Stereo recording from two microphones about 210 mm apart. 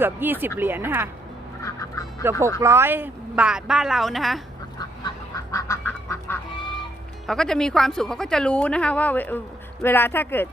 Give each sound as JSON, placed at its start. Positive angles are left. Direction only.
{"t": 0.0, "sound": "speech", "side_deg": -10}
{"t": 1.6, "sound": "goose", "side_deg": 15}
{"t": 2.6, "sound": "a woman's voice", "side_deg": -15}
{"t": 4.8, "sound": "duck", "side_deg": 15}
{"t": 7.3, "sound": "a woman's voice", "side_deg": 0}